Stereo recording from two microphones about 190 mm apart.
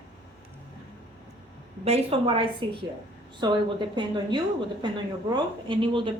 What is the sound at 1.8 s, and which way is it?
Speech, 30° right (ahead or behind).